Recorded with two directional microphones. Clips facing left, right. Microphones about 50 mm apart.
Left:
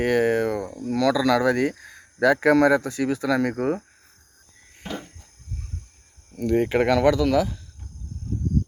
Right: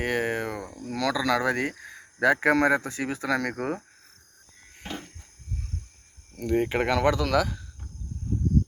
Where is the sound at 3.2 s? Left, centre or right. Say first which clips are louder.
Left 3 dB; right.